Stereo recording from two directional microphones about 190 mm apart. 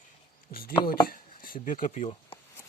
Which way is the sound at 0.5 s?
50° left (ahead or behind).